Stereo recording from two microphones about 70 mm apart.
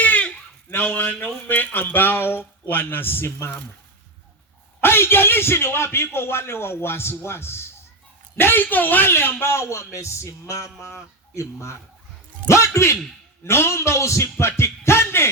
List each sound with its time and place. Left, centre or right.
0.0 s a sound: left
0.7 s a man's voice: left
4.8 s a man's voice: left